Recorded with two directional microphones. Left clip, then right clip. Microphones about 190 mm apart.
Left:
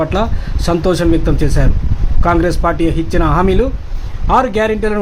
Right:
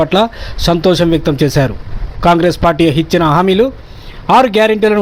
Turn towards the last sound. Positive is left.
turn(degrees=-20)  # may be behind; listen again after turning